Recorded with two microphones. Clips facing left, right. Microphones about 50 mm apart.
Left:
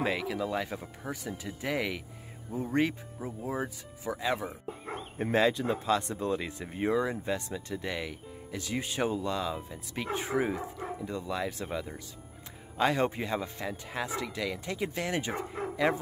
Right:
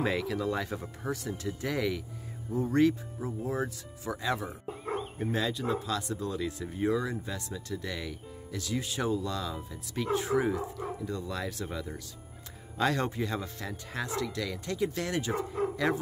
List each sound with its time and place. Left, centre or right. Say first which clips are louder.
0.0 s speech: right 1 dB; centre
5.2 s speech: left 7 dB; left
5.7 s speech: left 3 dB; left
10.8 s speech: right 1 dB; centre
15.2 s speech: right 4 dB; left